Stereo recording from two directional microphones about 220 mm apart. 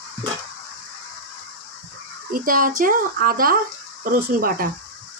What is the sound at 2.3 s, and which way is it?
Speech, 40° right (ahead or behind).